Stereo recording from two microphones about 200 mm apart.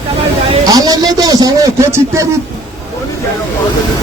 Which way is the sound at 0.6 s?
20° right (ahead or behind).